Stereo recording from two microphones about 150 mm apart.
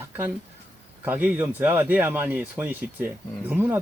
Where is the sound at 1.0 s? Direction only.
10° right (ahead or behind).